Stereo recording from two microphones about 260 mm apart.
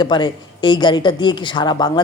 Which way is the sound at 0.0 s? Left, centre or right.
Centre.